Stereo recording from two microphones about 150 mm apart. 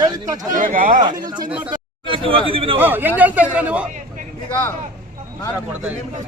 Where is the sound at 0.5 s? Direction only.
65° right (ahead or behind).